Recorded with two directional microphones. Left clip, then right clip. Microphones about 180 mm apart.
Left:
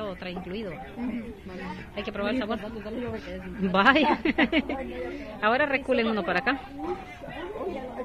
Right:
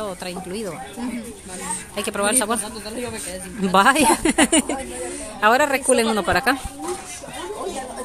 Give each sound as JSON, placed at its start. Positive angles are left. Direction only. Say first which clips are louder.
{"t": 0.0, "sound": "speech", "louder": "right 6 dB", "side_deg": -55}
{"t": 2.0, "sound": "speech", "louder": "right 8 dB", "side_deg": -60}
{"t": 3.6, "sound": "a woman's voice", "louder": "right 5 dB", "side_deg": -55}